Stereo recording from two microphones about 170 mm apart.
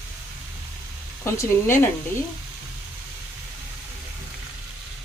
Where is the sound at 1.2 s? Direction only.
15° left (ahead or behind).